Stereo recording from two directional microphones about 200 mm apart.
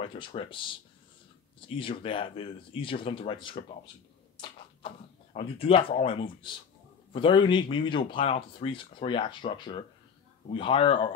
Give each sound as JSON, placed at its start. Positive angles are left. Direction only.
{"t": 0.0, "sound": "speech", "side_deg": 25}
{"t": 1.8, "sound": "speech", "side_deg": 25}